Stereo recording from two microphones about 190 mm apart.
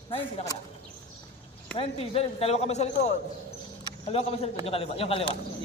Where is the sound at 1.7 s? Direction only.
30° left (ahead or behind).